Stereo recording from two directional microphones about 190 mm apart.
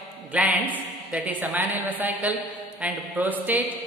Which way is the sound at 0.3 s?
10° right (ahead or behind).